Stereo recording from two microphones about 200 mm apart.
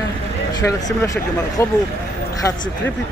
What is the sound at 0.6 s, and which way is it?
Speech, 15° left (ahead or behind).